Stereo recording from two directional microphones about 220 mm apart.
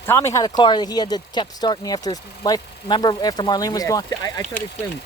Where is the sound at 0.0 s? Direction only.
10° left (ahead or behind).